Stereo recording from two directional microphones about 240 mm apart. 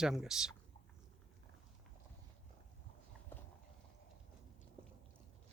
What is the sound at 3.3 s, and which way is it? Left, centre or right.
Clip-clop, centre.